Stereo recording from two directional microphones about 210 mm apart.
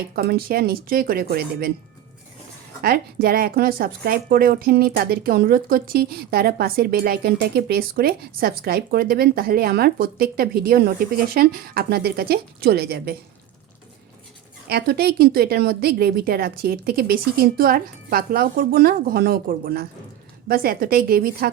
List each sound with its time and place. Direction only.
0.2 s speech: 45° right (ahead or behind)
2.8 s speech: 45° right (ahead or behind)
14.7 s speech: 45° right (ahead or behind)